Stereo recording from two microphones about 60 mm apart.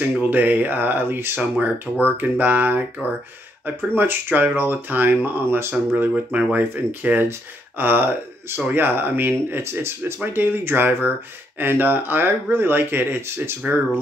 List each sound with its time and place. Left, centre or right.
0.3 s speech: right
2.1 s a sound: right
3.6 s speech: right
9.6 s speech: right